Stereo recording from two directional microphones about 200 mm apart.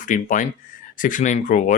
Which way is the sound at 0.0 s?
40° left (ahead or behind).